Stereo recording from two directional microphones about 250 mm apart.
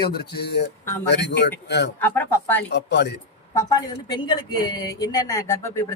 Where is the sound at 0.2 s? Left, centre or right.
Left.